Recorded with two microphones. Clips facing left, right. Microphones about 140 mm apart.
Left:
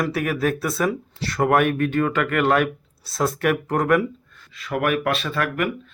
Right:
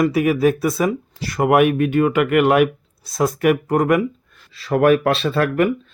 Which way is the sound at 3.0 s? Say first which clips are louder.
Right 4 dB; centre (ahead or behind).